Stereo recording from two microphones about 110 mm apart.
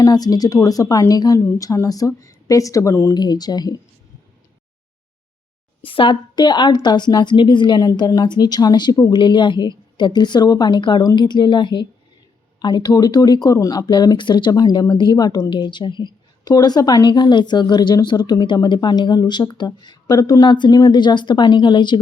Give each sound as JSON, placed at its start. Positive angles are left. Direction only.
{"t": 0.0, "sound": "speech", "side_deg": 35}
{"t": 3.2, "sound": "speech", "side_deg": 40}
{"t": 5.8, "sound": "a woman's voice", "side_deg": 55}